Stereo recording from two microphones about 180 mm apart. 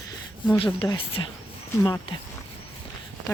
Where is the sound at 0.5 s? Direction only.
30° left (ahead or behind).